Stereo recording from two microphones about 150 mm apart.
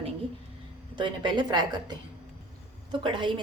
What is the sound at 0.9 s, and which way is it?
A woman's voice, 30° right (ahead or behind).